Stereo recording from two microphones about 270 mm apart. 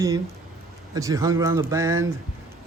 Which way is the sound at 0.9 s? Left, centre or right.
Centre.